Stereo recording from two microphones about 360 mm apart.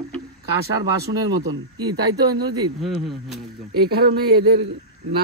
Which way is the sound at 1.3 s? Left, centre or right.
Centre.